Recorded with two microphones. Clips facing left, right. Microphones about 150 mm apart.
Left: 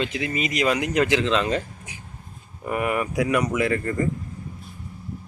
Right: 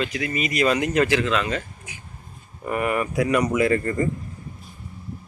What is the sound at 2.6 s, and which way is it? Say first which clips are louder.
Speech: right 1 dB; 15° left (ahead or behind).